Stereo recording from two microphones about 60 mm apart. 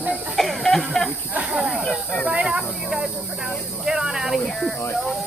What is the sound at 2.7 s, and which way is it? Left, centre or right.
Snake, centre.